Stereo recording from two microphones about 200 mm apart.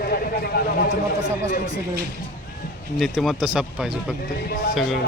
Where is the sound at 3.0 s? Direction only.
Centre (ahead or behind).